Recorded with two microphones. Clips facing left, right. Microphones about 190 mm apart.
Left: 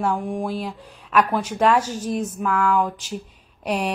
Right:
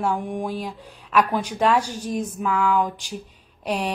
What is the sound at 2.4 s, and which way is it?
Speech, 5° right (ahead or behind).